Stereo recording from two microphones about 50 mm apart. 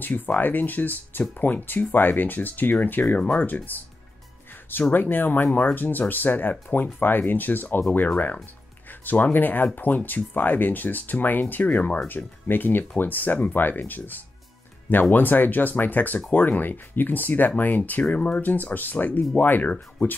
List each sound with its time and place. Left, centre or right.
0.0 s speech: left
4.9 s speech: left
9.0 s speech: left
12.4 s speech: left